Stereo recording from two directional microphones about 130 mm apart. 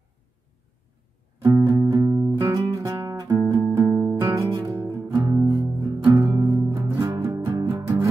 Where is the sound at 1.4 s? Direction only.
25° right (ahead or behind).